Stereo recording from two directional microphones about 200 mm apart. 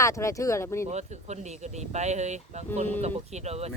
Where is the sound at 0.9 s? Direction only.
35° right (ahead or behind).